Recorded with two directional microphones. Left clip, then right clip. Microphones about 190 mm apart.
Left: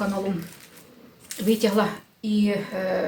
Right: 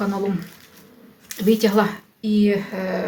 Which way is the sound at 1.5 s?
35° right (ahead or behind).